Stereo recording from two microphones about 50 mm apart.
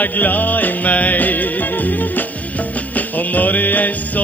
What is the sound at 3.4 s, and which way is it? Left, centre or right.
Music, left.